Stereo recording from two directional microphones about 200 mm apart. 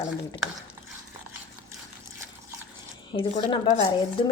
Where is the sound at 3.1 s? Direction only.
25° left (ahead or behind).